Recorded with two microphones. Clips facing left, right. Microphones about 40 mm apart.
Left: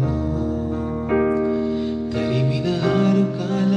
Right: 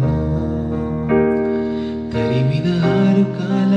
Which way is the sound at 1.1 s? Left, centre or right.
Centre.